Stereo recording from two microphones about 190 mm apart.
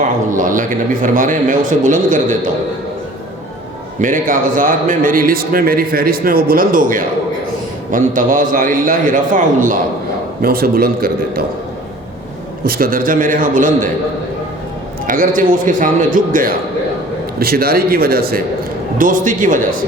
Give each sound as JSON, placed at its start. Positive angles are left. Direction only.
{"t": 0.0, "sound": "a man's voice", "side_deg": -45}
{"t": 4.0, "sound": "a man's voice", "side_deg": -45}
{"t": 12.6, "sound": "a man's voice", "side_deg": -50}
{"t": 15.0, "sound": "a man's voice", "side_deg": -45}